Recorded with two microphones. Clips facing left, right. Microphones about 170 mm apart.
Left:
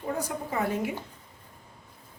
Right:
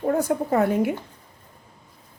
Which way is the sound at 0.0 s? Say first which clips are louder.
Right 10 dB; 55° right (ahead or behind).